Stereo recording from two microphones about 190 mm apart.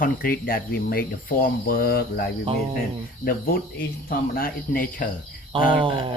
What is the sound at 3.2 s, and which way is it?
Speech, 50° left (ahead or behind).